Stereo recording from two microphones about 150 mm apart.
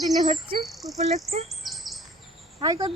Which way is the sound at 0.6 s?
Centre (ahead or behind).